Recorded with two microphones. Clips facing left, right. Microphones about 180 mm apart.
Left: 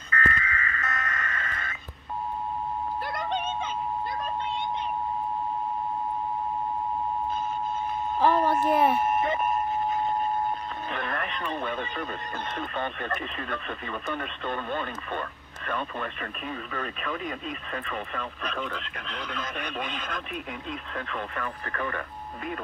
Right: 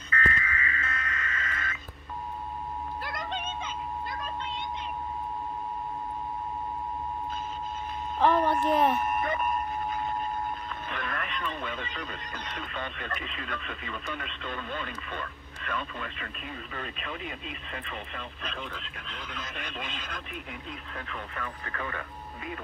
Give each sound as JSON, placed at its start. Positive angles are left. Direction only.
{"t": 0.1, "sound": "a sound", "side_deg": 45}
{"t": 4.2, "sound": "vehicle", "side_deg": 50}
{"t": 8.2, "sound": "a sound", "side_deg": 5}
{"t": 9.0, "sound": "vehicle", "side_deg": 25}
{"t": 10.9, "sound": "radio", "side_deg": 45}
{"t": 12.5, "sound": "speech", "side_deg": 50}
{"t": 19.9, "sound": "speech", "side_deg": 55}